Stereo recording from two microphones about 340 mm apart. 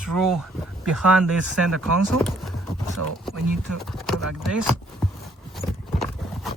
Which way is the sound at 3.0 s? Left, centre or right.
Right.